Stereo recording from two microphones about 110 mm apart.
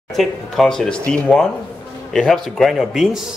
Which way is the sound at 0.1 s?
Centre (ahead or behind).